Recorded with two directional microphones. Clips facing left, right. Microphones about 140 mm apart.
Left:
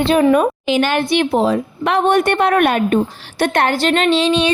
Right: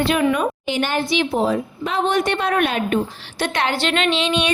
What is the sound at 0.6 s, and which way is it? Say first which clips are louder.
Speech: left 5 dB; 90° left.